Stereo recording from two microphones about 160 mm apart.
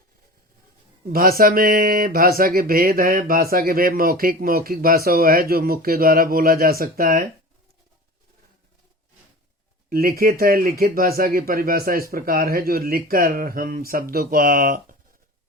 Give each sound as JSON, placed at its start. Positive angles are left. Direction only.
{"t": 1.1, "sound": "speech", "side_deg": -65}
{"t": 9.9, "sound": "speech", "side_deg": -70}